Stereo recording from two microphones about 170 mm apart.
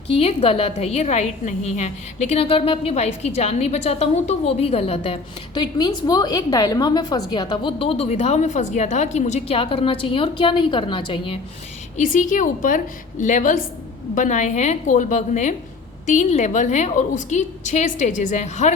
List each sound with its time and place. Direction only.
0.1 s a woman's voice: 35° left (ahead or behind)
11.9 s a woman's voice: 50° left (ahead or behind)